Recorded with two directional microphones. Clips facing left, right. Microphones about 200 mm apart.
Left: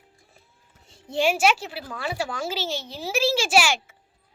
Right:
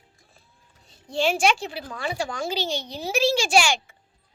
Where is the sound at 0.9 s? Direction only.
25° left (ahead or behind).